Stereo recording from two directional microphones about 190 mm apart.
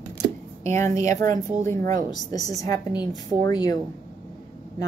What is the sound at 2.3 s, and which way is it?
A woman's voice, 20° left (ahead or behind).